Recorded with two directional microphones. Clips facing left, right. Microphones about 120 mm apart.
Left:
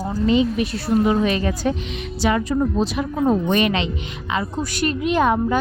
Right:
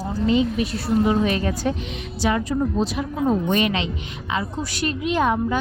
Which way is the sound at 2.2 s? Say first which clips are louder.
Left 2 dB; 75° left (ahead or behind).